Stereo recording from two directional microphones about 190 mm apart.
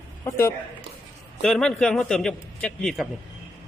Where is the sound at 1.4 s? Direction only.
Centre (ahead or behind).